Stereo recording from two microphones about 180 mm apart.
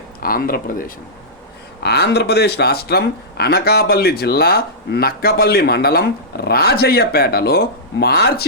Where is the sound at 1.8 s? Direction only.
65° left (ahead or behind).